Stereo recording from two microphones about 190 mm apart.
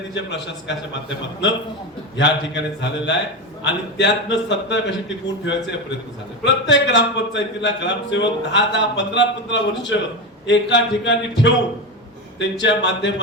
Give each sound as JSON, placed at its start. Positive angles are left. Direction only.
{"t": 0.1, "sound": "a man's voice", "side_deg": 70}
{"t": 2.1, "sound": "a man's voice", "side_deg": 70}
{"t": 12.6, "sound": "a man's voice", "side_deg": 70}